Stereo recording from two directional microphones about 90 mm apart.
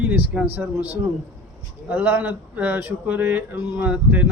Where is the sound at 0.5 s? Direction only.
20° right (ahead or behind).